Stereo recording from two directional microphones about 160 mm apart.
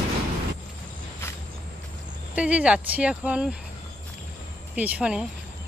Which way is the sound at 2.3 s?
10° right (ahead or behind).